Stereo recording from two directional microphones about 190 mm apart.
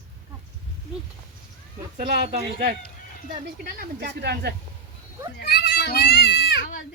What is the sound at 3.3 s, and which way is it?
Speech, 50° right (ahead or behind).